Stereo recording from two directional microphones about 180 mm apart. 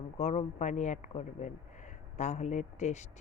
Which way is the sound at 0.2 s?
40° left (ahead or behind).